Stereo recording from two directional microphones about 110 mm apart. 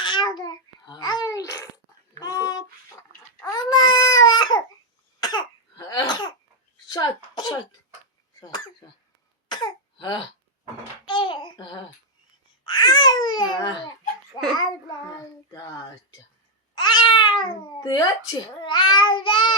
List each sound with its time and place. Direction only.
0.0 s babbling: 45° left (ahead or behind)
2.1 s dog: 35° left (ahead or behind)
3.4 s baby cry: 40° left (ahead or behind)
5.2 s cough: 40° left (ahead or behind)
6.8 s a sound: 35° left (ahead or behind)
8.4 s cough: 35° left (ahead or behind)
11.0 s babbling: 50° left (ahead or behind)
14.5 s child singing: 35° left (ahead or behind)
16.7 s cat: 45° left (ahead or behind)